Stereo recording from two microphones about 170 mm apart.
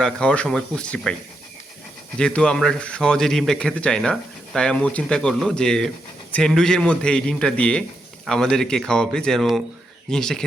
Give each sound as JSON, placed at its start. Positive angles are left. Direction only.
{"t": 0.0, "sound": "speech", "side_deg": 5}
{"t": 2.1, "sound": "speech", "side_deg": 5}